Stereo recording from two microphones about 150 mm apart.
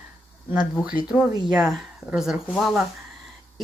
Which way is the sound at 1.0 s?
5° right (ahead or behind).